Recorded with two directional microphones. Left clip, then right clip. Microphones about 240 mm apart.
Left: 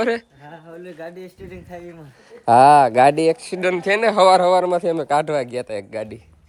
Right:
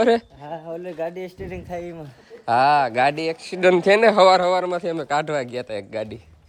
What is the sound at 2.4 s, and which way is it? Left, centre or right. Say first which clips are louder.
Speech: left 6 dB; centre.